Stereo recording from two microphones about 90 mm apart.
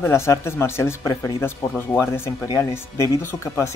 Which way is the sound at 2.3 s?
40° left (ahead or behind).